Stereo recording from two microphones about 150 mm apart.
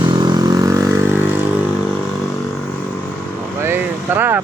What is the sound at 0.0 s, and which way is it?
Vehicle, 30° right (ahead or behind).